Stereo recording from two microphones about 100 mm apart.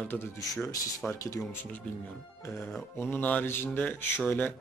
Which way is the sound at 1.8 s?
5° left (ahead or behind).